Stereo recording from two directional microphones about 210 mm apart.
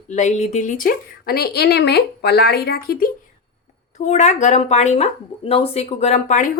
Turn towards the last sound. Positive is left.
turn(degrees=35)  # may be behind; listen again after turning